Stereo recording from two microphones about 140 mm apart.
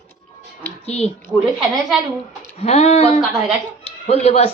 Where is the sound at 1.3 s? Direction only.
5° right (ahead or behind).